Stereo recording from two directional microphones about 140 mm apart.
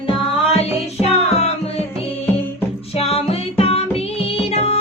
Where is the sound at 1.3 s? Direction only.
50° left (ahead or behind).